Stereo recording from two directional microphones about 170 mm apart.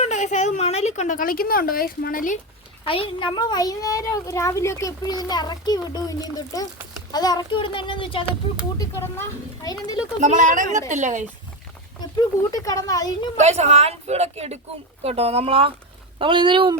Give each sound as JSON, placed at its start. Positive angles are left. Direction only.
{"t": 0.0, "sound": "a woman's voice", "side_deg": 45}
{"t": 2.8, "sound": "a child's voice", "side_deg": 30}
{"t": 8.8, "sound": "speech", "side_deg": 15}
{"t": 10.2, "sound": "speech", "side_deg": -45}
{"t": 11.9, "sound": "a child's voice", "side_deg": 20}
{"t": 13.3, "sound": "speech", "side_deg": -40}